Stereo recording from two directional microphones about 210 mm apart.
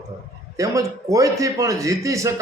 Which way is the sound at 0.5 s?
15° right (ahead or behind).